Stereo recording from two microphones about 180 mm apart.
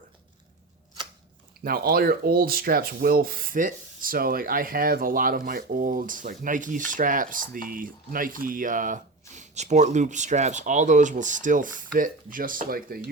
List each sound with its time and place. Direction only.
1.6 s rub: 55° right (ahead or behind)